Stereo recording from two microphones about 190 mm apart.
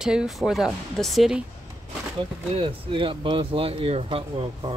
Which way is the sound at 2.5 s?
30° right (ahead or behind).